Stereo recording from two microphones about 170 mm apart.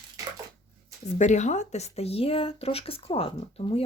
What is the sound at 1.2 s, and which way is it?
Speech, 45° left (ahead or behind).